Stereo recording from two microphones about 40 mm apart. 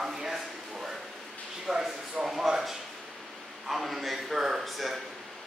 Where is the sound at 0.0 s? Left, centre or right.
Centre.